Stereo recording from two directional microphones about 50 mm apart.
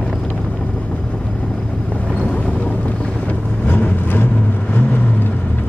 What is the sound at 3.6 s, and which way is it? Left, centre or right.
Vehicle, left.